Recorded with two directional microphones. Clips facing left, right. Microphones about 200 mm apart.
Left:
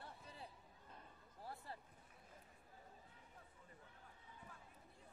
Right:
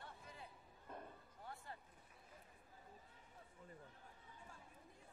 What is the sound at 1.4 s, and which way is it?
Basketball bounce, 35° left (ahead or behind).